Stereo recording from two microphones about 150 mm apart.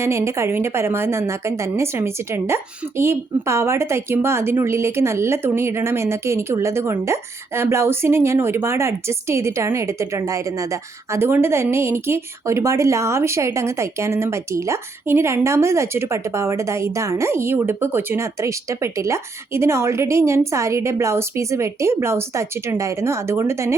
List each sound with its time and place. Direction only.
0.0 s a woman's voice: 20° right (ahead or behind)